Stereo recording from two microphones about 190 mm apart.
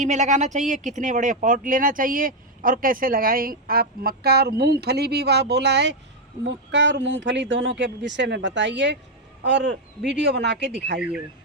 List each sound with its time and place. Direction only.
0.0 s speech: 40° right (ahead or behind); by 11.0 s 60° right (ahead or behind)